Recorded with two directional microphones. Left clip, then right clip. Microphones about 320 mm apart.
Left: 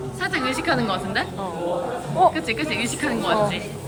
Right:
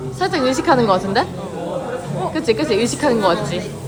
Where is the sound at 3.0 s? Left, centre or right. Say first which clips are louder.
Right 3 dB; centre.